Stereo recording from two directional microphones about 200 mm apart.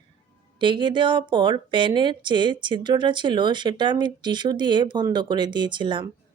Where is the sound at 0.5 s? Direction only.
25° right (ahead or behind).